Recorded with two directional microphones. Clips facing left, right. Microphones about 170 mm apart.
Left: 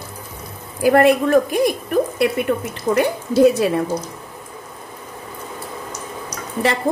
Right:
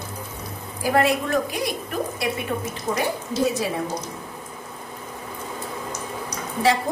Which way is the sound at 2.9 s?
65° left (ahead or behind).